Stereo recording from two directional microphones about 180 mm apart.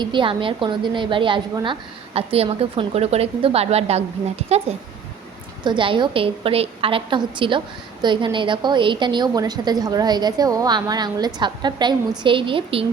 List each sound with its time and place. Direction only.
0.0 s a woman's voice: 25° right (ahead or behind)